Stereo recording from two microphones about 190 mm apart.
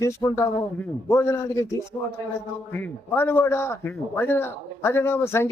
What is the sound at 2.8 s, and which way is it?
A man's voice, 10° left (ahead or behind).